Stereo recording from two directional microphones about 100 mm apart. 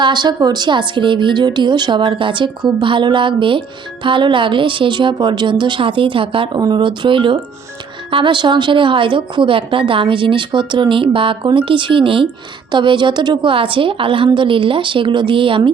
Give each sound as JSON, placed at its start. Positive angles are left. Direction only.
{"t": 0.0, "sound": "speech", "side_deg": -50}
{"t": 6.6, "sound": "speech", "side_deg": -45}